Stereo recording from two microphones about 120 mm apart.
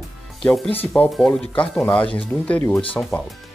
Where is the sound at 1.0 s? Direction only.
10° left (ahead or behind).